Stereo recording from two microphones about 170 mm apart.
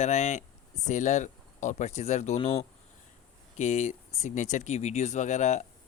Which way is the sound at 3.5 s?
45° left (ahead or behind).